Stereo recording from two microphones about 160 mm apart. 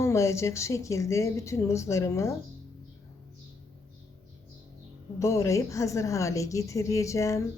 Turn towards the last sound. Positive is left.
turn(degrees=20)  # may be behind; listen again after turning